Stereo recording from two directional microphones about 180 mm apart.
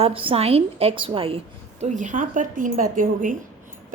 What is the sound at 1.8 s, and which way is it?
Speech, 45° right (ahead or behind).